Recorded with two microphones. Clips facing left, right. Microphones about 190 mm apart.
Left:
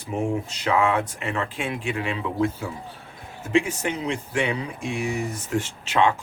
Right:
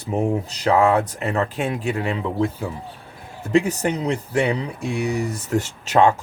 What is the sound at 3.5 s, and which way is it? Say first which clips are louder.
Speech: right 4 dB; 40° right (ahead or behind).